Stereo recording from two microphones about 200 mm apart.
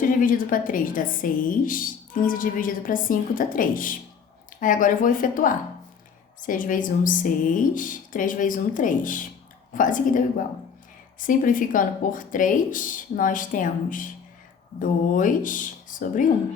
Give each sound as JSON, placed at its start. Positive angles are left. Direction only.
{"t": 0.2, "sound": "a woman's voice", "side_deg": 45}